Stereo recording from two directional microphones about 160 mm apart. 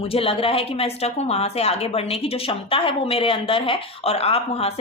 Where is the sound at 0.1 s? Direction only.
35° left (ahead or behind).